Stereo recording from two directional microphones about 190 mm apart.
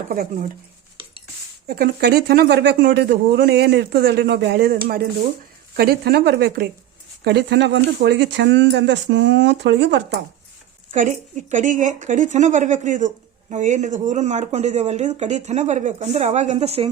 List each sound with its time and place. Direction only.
0.1 s speech: 45° right (ahead or behind)
1.6 s speech: 50° right (ahead or behind)
10.9 s speech: 40° right (ahead or behind)